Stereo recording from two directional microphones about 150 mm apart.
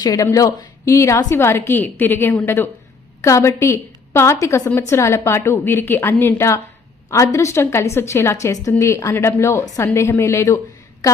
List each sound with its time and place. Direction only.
0.0 s a woman's voice: 25° left (ahead or behind)